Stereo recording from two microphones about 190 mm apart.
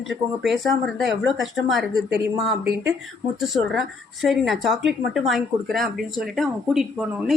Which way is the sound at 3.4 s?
Centre (ahead or behind).